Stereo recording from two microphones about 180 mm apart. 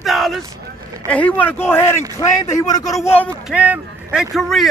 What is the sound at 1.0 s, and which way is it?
Speech, 10° left (ahead or behind).